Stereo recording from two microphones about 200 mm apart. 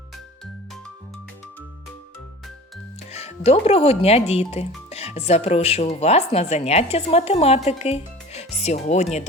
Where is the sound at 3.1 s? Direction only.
30° left (ahead or behind).